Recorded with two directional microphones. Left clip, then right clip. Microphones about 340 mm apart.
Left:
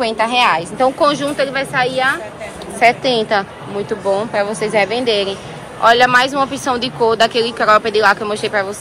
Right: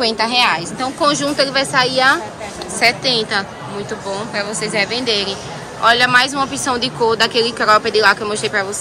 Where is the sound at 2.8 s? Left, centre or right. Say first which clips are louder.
Left 2 dB; centre.